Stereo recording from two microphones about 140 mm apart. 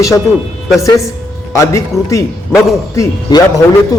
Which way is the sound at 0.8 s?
20° left (ahead or behind).